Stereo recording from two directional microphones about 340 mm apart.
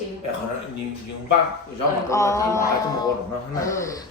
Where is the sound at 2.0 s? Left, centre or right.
Centre.